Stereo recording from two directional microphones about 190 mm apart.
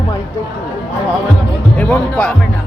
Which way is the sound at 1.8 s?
5° left (ahead or behind).